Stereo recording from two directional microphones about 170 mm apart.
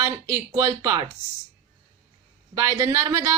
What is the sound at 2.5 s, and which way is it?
Speech, 20° right (ahead or behind).